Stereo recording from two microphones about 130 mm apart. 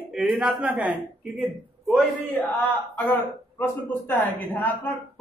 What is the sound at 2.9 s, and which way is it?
A man's voice, 20° left (ahead or behind).